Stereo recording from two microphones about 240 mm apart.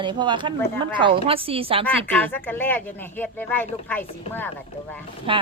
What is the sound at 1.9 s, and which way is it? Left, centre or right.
Speech, centre.